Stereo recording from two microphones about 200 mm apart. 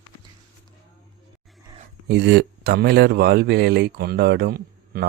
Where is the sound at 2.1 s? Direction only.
60° right (ahead or behind).